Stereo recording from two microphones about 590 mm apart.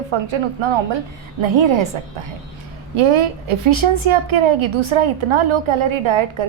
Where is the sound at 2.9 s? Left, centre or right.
Right.